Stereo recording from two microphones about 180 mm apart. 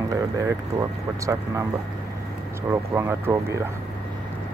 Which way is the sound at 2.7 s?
15° right (ahead or behind).